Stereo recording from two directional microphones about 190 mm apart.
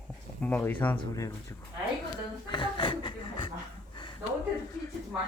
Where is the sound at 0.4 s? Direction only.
10° left (ahead or behind).